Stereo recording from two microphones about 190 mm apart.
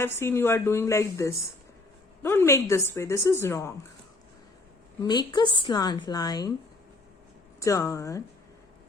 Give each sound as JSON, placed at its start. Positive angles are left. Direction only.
{"t": 0.0, "sound": "a woman's voice", "side_deg": 10}
{"t": 5.0, "sound": "a woman's voice", "side_deg": 20}
{"t": 7.6, "sound": "a woman's voice", "side_deg": 15}